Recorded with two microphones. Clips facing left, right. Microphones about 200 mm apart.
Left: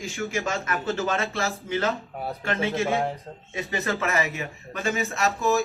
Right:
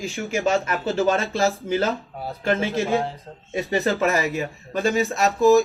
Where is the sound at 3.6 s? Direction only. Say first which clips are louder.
Right 6 dB; 30° right (ahead or behind).